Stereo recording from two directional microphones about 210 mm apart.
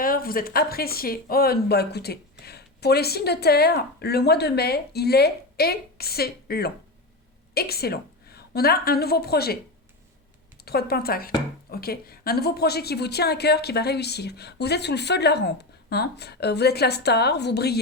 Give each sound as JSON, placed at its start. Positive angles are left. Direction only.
{"t": 0.0, "sound": "a woman's voice", "side_deg": 45}
{"t": 10.6, "sound": "a woman's voice", "side_deg": 50}